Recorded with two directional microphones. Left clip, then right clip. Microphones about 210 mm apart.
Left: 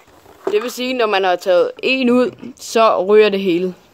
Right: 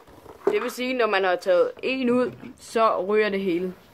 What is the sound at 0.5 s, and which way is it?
Speech, 40° left (ahead or behind).